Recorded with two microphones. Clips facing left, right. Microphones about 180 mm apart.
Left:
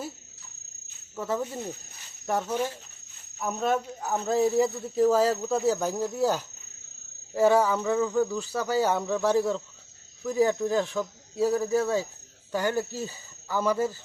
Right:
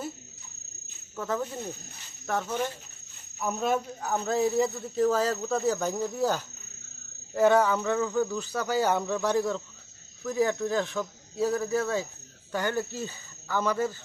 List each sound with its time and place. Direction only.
1.1 s speech: 5° left (ahead or behind)
3.3 s cricket: centre (ahead or behind)
10.2 s speech: 10° left (ahead or behind)